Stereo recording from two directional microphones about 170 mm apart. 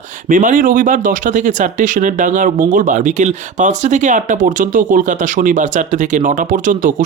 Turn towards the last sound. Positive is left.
turn(degrees=-50)  # may be behind; listen again after turning